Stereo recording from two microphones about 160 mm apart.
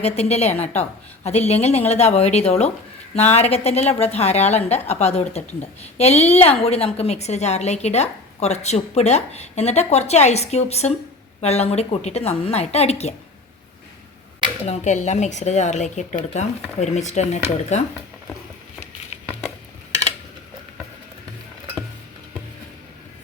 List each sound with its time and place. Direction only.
0.0 s a woman's voice: 40° left (ahead or behind)
14.6 s a woman's voice: 45° left (ahead or behind)